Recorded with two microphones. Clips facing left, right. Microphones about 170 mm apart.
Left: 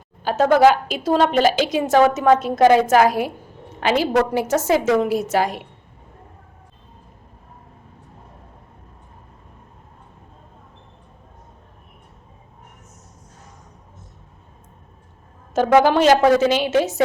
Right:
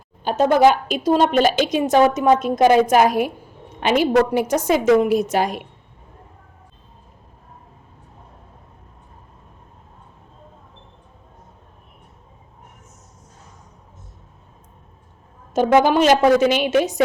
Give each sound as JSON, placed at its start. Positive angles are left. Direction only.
{"t": 0.3, "sound": "a woman's voice", "side_deg": -20}
{"t": 15.5, "sound": "a woman's voice", "side_deg": -15}